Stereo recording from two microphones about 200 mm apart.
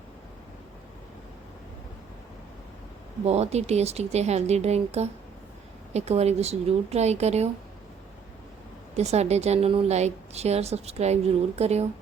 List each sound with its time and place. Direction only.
3.2 s a woman's voice: 30° right (ahead or behind)
9.0 s a woman's voice: 35° right (ahead or behind)